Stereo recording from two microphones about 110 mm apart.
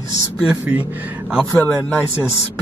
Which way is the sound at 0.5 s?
15° right (ahead or behind).